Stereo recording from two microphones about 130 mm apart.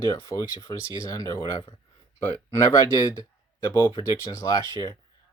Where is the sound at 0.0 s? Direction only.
30° left (ahead or behind).